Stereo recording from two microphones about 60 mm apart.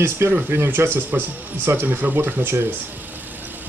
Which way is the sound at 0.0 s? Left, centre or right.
Right.